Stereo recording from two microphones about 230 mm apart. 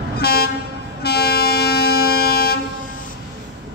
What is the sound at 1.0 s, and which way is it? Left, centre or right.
Music, left.